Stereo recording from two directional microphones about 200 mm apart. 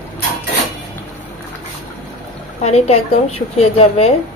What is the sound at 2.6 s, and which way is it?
A woman's voice, 30° left (ahead or behind).